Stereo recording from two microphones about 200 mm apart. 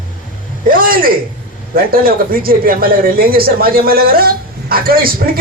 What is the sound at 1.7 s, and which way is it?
A man's voice, 45° right (ahead or behind).